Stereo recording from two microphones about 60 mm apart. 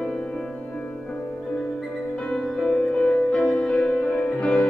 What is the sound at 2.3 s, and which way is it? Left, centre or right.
Music, centre.